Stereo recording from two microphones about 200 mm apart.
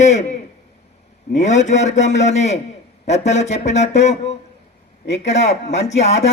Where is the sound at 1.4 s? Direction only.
35° left (ahead or behind).